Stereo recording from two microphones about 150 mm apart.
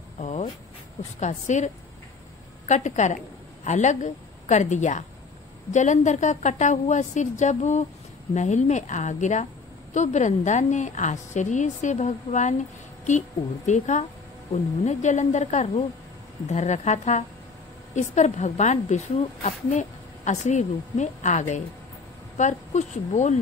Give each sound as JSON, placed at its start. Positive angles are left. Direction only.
{"t": 0.2, "sound": "a sound", "side_deg": 50}
{"t": 1.2, "sound": "a woman's voice", "side_deg": 50}
{"t": 2.7, "sound": "a woman's voice", "side_deg": 50}
{"t": 13.7, "sound": "a woman's voice", "side_deg": 50}